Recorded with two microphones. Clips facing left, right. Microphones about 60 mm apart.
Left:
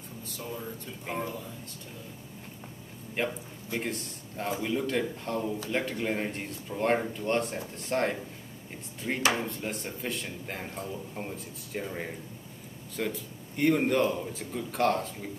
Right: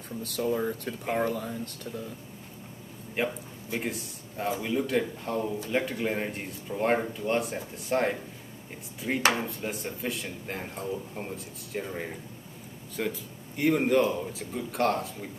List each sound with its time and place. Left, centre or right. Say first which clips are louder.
0.2 s speech: right 11 dB; right
3.2 s speech: right 1 dB; centre
9.3 s speech: right 1 dB; centre